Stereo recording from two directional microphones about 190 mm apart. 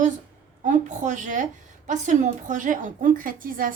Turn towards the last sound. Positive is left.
turn(degrees=-45)  # may be behind; listen again after turning